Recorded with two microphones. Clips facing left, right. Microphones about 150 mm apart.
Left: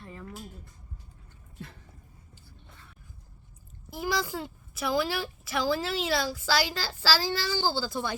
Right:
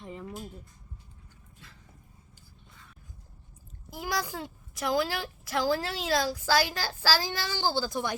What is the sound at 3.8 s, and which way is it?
A woman's voice, 15° right (ahead or behind).